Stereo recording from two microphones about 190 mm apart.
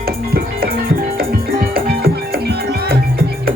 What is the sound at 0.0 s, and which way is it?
Music, 50° right (ahead or behind).